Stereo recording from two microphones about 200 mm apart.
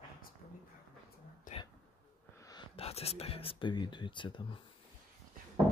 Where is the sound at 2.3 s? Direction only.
20° left (ahead or behind).